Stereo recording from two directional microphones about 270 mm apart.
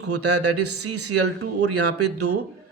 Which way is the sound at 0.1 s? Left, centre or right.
Right.